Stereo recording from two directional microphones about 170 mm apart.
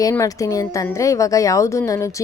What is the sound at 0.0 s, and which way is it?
A woman's voice, 20° left (ahead or behind).